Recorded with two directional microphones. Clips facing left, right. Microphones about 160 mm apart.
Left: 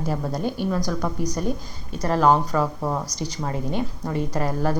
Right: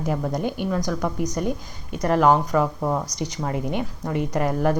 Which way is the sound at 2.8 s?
5° left (ahead or behind).